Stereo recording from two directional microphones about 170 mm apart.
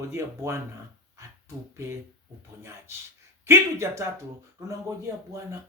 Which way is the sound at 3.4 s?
15° right (ahead or behind).